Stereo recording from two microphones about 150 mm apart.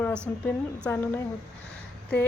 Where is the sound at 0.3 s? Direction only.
5° left (ahead or behind).